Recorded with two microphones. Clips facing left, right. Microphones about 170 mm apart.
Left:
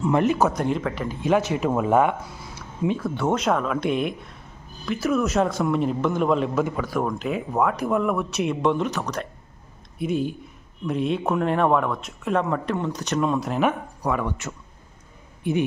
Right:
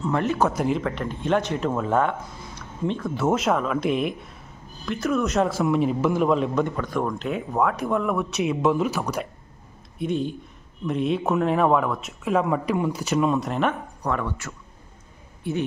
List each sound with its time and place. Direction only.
0.0 s speech: 15° left (ahead or behind)
0.4 s a man's voice: centre (ahead or behind)
10.0 s a man's voice: 5° left (ahead or behind)
15.4 s speech: 15° left (ahead or behind)